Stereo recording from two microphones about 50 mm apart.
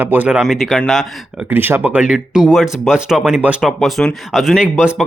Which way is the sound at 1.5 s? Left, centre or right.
Right.